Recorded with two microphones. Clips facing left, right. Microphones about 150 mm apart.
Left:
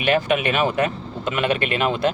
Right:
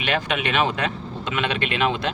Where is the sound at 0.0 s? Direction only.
45° left (ahead or behind).